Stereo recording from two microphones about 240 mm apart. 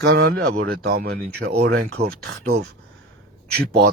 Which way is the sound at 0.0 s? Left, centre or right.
Right.